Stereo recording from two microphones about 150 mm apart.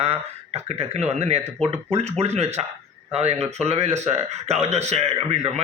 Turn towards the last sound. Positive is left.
turn(degrees=-45)  # may be behind; listen again after turning